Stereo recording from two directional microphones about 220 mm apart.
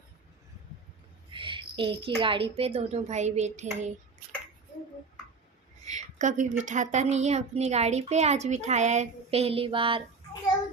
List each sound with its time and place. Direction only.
1.3 s a woman's voice: 20° right (ahead or behind)
5.8 s a woman's voice: 30° right (ahead or behind)